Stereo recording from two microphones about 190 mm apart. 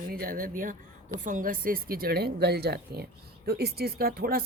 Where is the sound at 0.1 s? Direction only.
50° right (ahead or behind).